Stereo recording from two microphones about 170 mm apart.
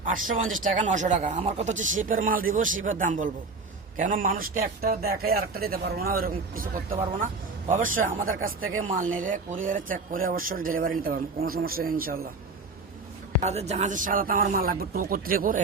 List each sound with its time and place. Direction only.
0.3 s speech: 50° right (ahead or behind)
6.9 s speech: 35° right (ahead or behind)
7.7 s speech: 50° right (ahead or behind)
13.4 s speech: 40° right (ahead or behind); by 15.6 s 55° right (ahead or behind)